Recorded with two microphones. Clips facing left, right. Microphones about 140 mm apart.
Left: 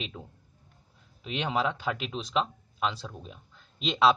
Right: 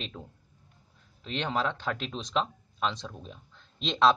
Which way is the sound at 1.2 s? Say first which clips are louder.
Left 1 dB; 10° left (ahead or behind).